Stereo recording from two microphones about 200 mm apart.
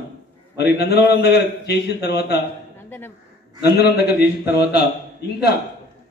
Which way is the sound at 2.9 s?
10° left (ahead or behind).